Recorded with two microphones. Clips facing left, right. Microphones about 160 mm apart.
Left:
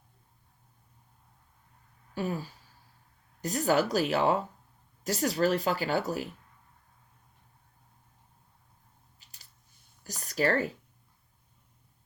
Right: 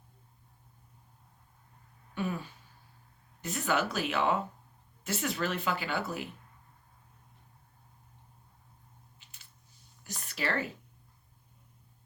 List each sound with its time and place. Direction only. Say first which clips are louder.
2.1 s speech: left 2 dB; 35° left (ahead or behind)
9.1 s a sound: right 1 dB; 40° left (ahead or behind)
10.0 s speech: left 8 dB; 40° left (ahead or behind)